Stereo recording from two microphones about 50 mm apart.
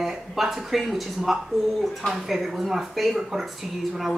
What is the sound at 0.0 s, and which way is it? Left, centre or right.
Speech, centre.